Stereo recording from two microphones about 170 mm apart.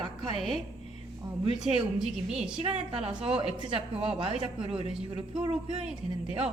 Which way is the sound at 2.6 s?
35° right (ahead or behind).